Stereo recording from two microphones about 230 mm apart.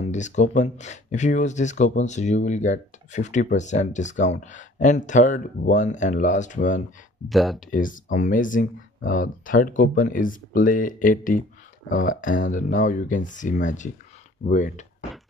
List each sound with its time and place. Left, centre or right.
0.0 s speech: left
7.2 s speech: centre
7.7 s speech: left